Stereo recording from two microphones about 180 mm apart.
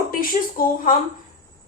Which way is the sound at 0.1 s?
50° left (ahead or behind).